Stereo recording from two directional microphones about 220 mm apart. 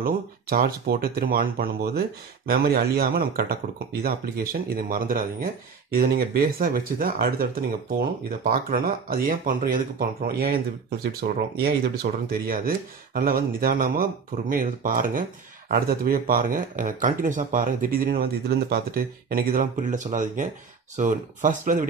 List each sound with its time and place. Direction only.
0.0 s speech: 40° right (ahead or behind)